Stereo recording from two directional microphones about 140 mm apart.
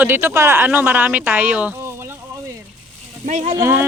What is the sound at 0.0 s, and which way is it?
Speech, 15° right (ahead or behind).